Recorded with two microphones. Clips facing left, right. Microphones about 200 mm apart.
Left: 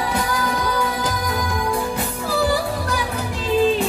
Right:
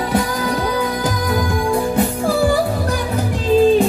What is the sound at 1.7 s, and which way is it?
Music, 45° right (ahead or behind).